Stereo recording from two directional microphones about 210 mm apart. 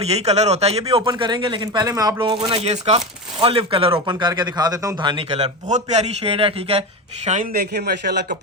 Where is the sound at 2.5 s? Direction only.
30° right (ahead or behind).